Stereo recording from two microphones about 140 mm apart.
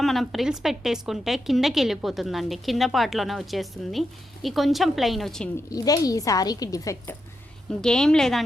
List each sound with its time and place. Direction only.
0.0 s a woman's voice: centre (ahead or behind)
5.7 s speech: 25° left (ahead or behind)
7.8 s a woman's voice: 5° left (ahead or behind)